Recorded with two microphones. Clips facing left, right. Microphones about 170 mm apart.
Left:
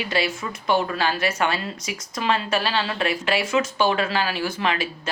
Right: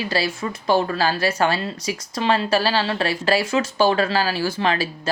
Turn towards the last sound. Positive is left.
turn(degrees=-35)  # may be behind; listen again after turning